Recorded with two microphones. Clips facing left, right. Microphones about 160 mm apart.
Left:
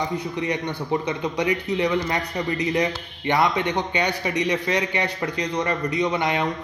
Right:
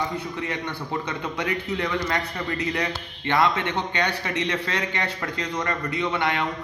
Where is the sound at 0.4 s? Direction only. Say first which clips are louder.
Left 4 dB; 15° left (ahead or behind).